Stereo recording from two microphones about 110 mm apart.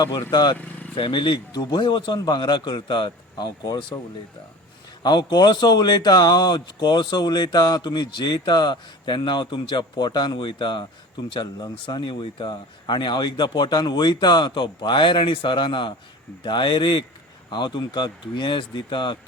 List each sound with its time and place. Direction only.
0.3 s speech: 40° left (ahead or behind)
0.5 s vehicle: 15° left (ahead or behind)
0.9 s speech: 50° left (ahead or behind)
5.0 s speech: 40° left (ahead or behind)